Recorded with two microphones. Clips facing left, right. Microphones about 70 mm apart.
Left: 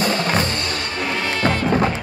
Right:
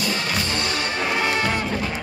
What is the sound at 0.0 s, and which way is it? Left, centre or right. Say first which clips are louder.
Music: left 5 dB; left.